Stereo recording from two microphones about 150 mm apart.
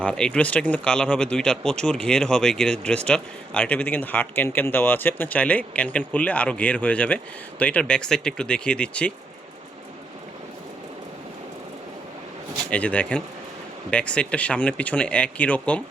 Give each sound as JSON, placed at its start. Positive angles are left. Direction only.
{"t": 0.0, "sound": "a man's voice", "side_deg": 5}
{"t": 12.7, "sound": "a man's voice", "side_deg": 10}